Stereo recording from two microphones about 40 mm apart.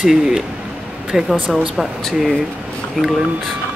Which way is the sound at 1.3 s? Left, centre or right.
Centre.